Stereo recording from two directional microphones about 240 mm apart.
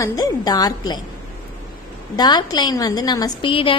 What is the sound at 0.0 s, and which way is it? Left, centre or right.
A woman's voice, centre.